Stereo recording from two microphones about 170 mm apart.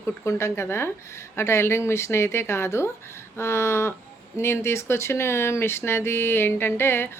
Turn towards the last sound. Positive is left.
turn(degrees=15)  # may be behind; listen again after turning